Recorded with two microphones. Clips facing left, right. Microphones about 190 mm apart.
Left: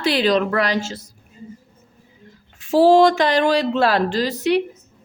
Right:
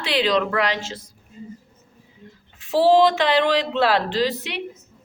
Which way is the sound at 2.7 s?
45° left (ahead or behind).